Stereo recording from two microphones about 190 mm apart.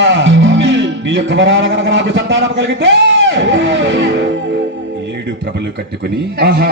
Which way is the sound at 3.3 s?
70° right (ahead or behind).